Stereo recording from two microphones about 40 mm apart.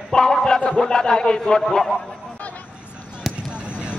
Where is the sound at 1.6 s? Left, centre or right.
Centre.